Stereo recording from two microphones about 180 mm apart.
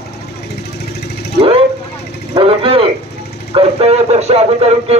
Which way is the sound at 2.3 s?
30° right (ahead or behind).